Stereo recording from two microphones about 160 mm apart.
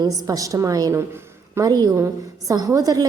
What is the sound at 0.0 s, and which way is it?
A woman's voice, 20° right (ahead or behind).